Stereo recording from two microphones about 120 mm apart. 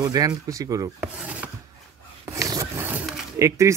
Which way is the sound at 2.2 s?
30° right (ahead or behind).